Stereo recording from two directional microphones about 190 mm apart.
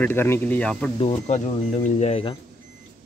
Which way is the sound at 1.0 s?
35° left (ahead or behind).